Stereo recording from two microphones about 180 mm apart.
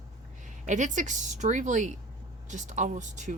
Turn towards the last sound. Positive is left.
turn(degrees=-45)  # may be behind; listen again after turning